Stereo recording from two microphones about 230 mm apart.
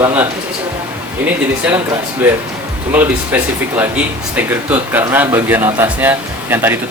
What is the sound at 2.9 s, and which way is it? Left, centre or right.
Speech, centre.